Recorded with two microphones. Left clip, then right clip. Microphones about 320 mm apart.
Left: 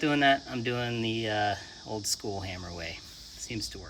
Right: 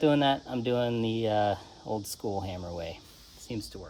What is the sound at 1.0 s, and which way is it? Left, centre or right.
Speech, centre.